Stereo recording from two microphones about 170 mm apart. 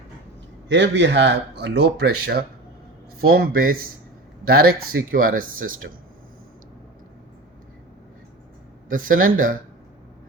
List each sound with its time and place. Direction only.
0.7 s speech: 90° right; by 5.7 s 55° right (ahead or behind)
8.9 s speech: 55° right (ahead or behind)